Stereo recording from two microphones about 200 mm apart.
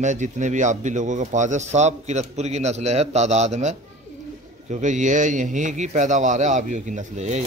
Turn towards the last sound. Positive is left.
turn(degrees=-35)  # may be behind; listen again after turning